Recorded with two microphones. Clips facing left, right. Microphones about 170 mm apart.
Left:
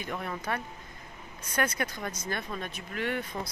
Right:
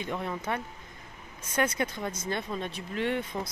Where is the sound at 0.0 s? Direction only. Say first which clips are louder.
Right 2 dB; 20° right (ahead or behind).